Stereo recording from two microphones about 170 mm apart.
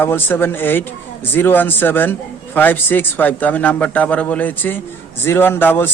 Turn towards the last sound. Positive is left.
turn(degrees=15)  # may be behind; listen again after turning